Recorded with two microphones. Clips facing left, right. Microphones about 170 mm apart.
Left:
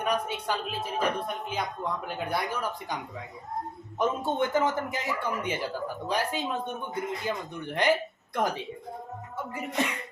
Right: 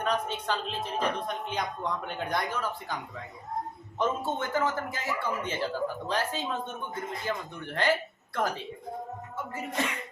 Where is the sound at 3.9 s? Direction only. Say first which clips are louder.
Left 3 dB; 20° left (ahead or behind).